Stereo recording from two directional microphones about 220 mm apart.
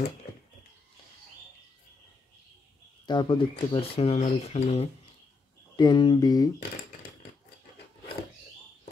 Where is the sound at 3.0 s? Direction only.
20° left (ahead or behind).